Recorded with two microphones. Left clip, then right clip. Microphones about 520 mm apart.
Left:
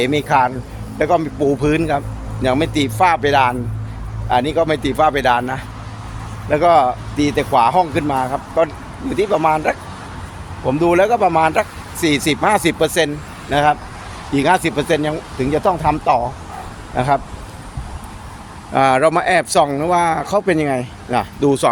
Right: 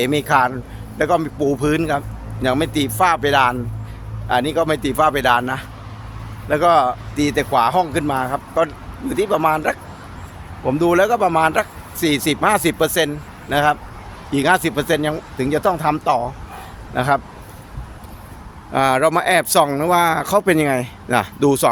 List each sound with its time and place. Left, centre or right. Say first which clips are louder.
0.0 s a man's voice: left 1 dB; right
18.7 s a man's voice: left 2 dB; right